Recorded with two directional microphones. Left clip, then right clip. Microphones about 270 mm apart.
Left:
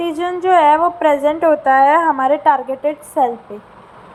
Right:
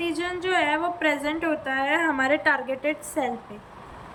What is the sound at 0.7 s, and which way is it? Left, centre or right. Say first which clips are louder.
Speech: left 12 dB; centre.